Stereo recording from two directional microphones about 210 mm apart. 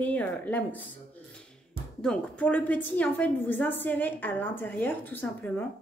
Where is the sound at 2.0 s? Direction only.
5° left (ahead or behind).